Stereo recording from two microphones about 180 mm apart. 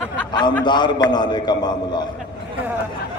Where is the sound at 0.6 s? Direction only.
25° left (ahead or behind).